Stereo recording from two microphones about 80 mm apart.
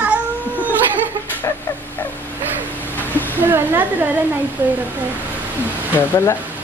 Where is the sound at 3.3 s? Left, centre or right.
Right.